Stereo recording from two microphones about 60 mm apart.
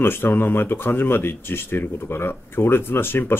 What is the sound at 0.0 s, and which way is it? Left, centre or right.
Speech, left.